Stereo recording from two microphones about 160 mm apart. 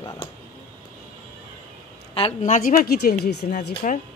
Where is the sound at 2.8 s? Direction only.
75° left (ahead or behind).